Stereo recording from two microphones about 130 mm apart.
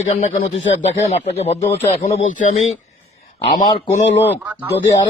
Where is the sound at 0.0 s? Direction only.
65° left (ahead or behind).